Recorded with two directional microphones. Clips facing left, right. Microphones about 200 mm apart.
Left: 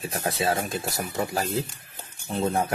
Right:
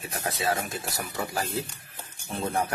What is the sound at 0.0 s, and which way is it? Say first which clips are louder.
Speech: left 3 dB; 30° left (ahead or behind).